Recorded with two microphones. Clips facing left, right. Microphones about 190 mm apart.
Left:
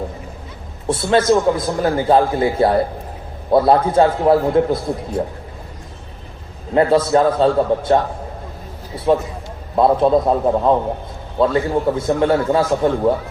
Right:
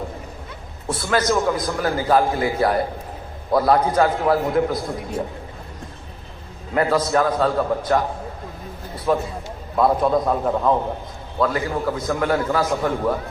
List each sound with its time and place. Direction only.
0.9 s a man's voice: 25° left (ahead or behind)
6.7 s a man's voice: 25° left (ahead or behind)
9.0 s a man's voice: 20° left (ahead or behind)